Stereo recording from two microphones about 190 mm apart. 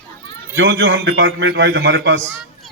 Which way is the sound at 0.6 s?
70° right (ahead or behind).